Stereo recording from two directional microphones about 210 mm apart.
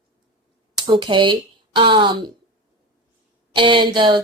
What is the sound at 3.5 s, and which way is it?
Speech, 25° right (ahead or behind).